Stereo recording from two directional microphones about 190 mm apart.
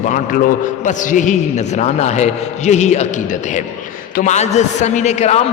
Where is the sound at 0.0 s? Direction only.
45° left (ahead or behind).